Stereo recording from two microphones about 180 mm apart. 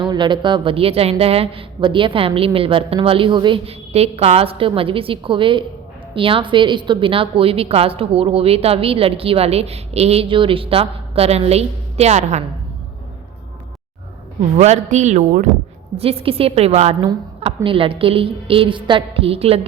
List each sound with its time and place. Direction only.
0.0 s a woman's voice: 25° right (ahead or behind)
14.5 s a woman's voice: 40° right (ahead or behind)